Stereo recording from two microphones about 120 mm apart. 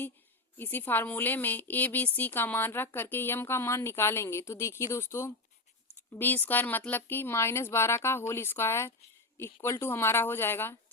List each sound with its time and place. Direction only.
0.5 s a woman's voice: 15° left (ahead or behind)